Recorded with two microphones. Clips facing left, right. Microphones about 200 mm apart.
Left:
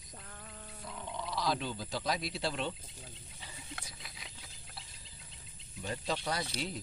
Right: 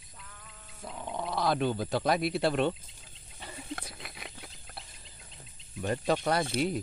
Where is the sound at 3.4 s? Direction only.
60° right (ahead or behind).